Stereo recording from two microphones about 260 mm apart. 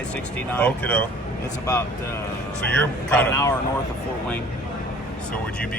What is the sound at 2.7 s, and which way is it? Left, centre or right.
Speech, centre.